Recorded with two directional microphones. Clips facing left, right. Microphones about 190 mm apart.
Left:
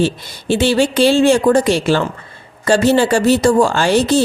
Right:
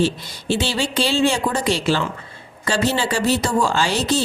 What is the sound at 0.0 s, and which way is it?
A woman's voice, 55° left (ahead or behind).